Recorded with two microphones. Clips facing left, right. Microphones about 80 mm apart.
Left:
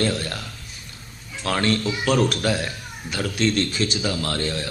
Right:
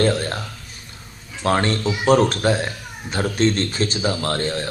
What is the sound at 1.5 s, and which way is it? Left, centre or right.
Speech, right.